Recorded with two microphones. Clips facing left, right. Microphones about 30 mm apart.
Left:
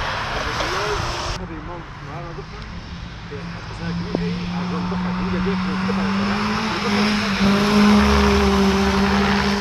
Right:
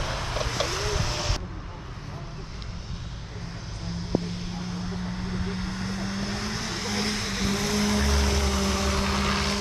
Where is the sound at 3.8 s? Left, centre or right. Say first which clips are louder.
Left 5 dB; left.